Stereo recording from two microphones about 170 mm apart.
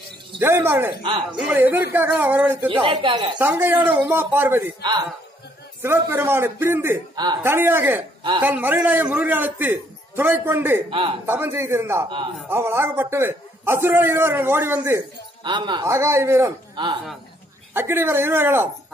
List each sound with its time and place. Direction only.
0.4 s a man's voice: 15° right (ahead or behind)
2.7 s a woman's voice: 30° right (ahead or behind)
3.3 s a man's voice: 10° right (ahead or behind)
5.8 s a man's voice: 15° right (ahead or behind)
10.9 s a man's voice: 30° right (ahead or behind)
11.2 s a man's voice: 15° right (ahead or behind)
15.4 s a man's voice: 25° right (ahead or behind)
17.7 s a man's voice: 15° right (ahead or behind)